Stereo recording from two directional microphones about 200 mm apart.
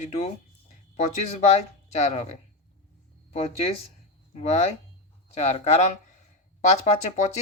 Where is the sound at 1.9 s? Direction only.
35° left (ahead or behind).